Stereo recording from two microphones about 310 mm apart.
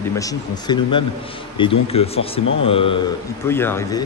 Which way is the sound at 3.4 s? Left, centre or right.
Centre.